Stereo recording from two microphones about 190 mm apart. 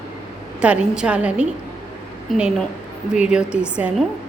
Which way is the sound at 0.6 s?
5° right (ahead or behind).